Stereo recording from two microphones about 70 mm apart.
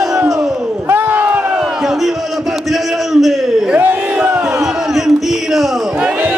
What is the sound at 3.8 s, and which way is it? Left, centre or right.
Battle cry, right.